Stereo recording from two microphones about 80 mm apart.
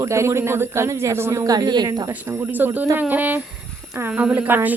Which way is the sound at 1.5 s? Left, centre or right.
Right.